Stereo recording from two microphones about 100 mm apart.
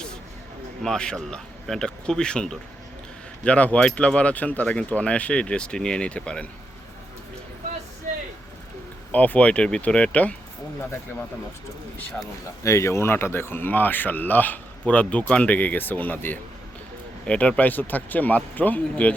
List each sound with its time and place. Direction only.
0.8 s speech: 5° left (ahead or behind)
9.1 s speech: 15° left (ahead or behind)
12.2 s speech: 30° left (ahead or behind); by 19.1 s 15° left (ahead or behind)